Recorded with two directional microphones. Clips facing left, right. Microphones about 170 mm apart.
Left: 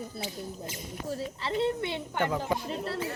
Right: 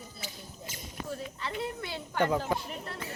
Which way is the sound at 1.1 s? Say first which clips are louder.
Left 5 dB; 35° left (ahead or behind).